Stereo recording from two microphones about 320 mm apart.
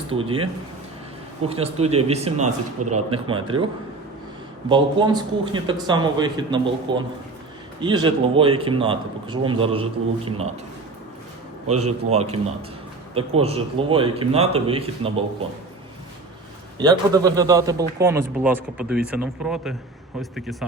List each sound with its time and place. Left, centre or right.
0.1 s a man's voice: centre
1.5 s speech: centre
2.8 s a man's voice: right
3.2 s a man's voice: centre
4.7 s a man's voice: centre
11.6 s a man's voice: right
12.1 s a man's voice: centre
16.7 s a man's voice: centre